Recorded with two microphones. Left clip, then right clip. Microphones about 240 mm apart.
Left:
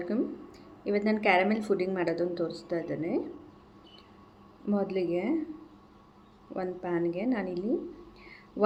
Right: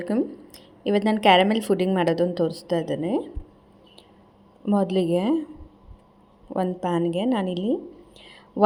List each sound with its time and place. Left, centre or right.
0.0 s speech: right
4.7 s speech: right
6.5 s speech: right
8.2 s whispering: right